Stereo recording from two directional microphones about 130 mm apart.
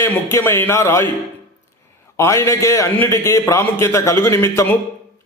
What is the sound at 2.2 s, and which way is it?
A man's voice, 25° left (ahead or behind).